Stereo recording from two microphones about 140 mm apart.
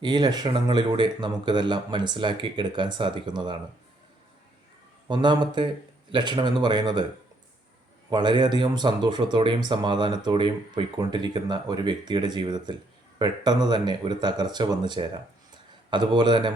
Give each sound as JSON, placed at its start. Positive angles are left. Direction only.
{"t": 0.0, "sound": "speech", "side_deg": -30}
{"t": 5.0, "sound": "speech", "side_deg": -30}
{"t": 8.1, "sound": "speech", "side_deg": -30}